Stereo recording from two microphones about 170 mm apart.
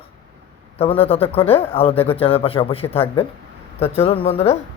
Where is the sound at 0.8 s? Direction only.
35° left (ahead or behind).